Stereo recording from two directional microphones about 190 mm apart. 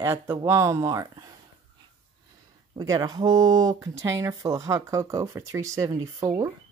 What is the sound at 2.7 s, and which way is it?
Speech, 20° right (ahead or behind).